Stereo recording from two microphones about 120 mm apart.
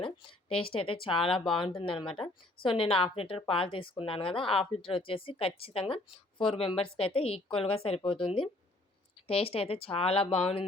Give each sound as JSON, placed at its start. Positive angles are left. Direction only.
{"t": 0.0, "sound": "a woman's voice", "side_deg": 50}